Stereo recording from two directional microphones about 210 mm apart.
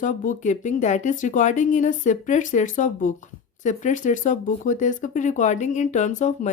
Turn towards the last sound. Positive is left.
turn(degrees=35)  # may be behind; listen again after turning